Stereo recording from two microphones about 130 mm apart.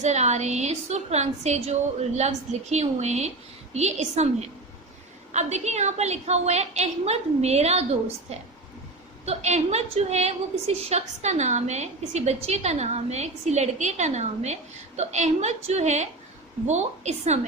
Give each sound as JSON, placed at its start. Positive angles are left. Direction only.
{"t": 0.0, "sound": "a woman's voice", "side_deg": -60}